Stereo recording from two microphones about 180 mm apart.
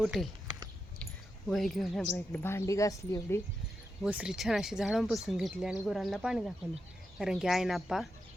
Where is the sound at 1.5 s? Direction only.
Centre (ahead or behind).